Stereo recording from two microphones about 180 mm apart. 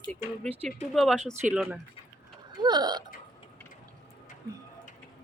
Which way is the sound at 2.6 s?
25° right (ahead or behind).